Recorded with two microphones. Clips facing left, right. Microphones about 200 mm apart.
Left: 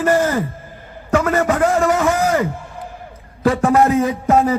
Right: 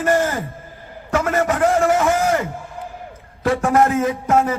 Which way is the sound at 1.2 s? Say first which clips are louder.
Right 1 dB; 40° left (ahead or behind).